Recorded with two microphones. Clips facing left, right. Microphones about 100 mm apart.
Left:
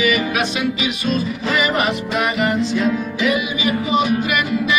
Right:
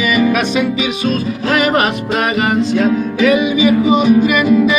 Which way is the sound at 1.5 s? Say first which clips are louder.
Right 6 dB; 70° right (ahead or behind).